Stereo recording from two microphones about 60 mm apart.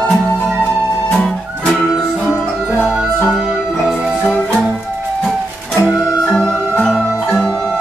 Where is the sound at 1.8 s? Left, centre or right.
Centre.